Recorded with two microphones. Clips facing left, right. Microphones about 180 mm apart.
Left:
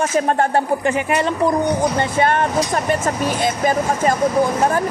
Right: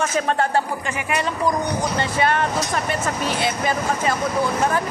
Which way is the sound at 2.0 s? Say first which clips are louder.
Left 3 dB; 50° left (ahead or behind).